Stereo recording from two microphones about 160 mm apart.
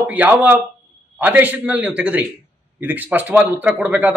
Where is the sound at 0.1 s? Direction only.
10° right (ahead or behind).